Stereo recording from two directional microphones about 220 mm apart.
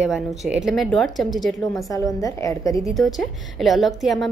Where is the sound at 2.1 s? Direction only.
15° left (ahead or behind).